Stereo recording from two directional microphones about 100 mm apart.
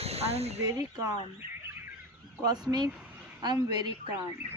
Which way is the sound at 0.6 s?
35° right (ahead or behind).